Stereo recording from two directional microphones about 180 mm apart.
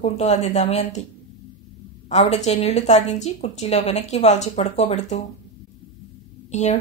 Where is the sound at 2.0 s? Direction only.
35° left (ahead or behind).